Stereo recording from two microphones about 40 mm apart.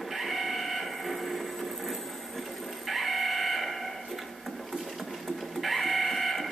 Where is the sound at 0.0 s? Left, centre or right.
Centre.